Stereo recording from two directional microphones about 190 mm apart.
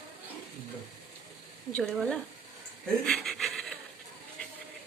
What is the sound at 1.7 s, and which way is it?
Speech, centre (ahead or behind).